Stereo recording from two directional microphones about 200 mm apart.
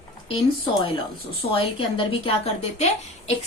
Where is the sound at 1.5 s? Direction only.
25° left (ahead or behind).